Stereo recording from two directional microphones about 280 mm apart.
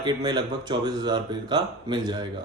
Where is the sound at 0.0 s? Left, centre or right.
Centre.